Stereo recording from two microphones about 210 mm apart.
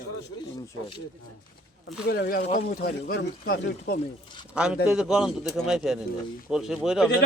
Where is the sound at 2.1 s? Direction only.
50° left (ahead or behind).